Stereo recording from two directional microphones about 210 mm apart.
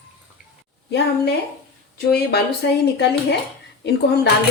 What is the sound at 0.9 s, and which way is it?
Speech, 50° left (ahead or behind).